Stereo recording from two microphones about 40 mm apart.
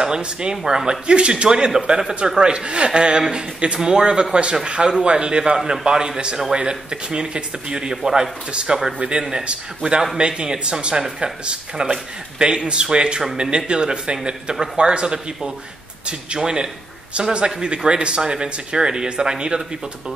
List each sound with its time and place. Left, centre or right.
0.0 s speech: right
1.7 s a man's voice: centre
8.5 s a man's voice: right